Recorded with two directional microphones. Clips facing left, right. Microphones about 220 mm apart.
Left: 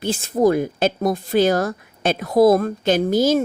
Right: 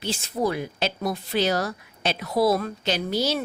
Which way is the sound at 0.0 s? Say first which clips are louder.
Left 8 dB; 50° left (ahead or behind).